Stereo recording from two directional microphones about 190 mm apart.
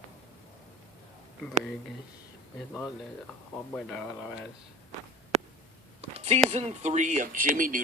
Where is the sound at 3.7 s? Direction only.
5° left (ahead or behind).